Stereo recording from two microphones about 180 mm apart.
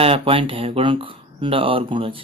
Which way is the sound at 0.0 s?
30° right (ahead or behind).